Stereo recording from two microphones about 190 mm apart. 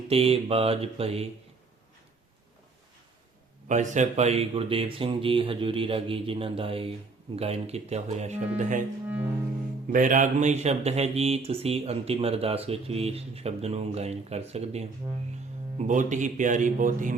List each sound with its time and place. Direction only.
0.1 s speech: 30° right (ahead or behind)
3.7 s speech: 40° right (ahead or behind)
9.0 s music: 10° right (ahead or behind)
9.9 s speech: 45° right (ahead or behind)